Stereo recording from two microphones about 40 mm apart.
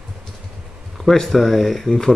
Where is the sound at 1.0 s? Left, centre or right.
Centre.